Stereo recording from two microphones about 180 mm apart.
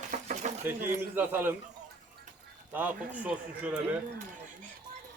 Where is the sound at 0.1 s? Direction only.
45° right (ahead or behind).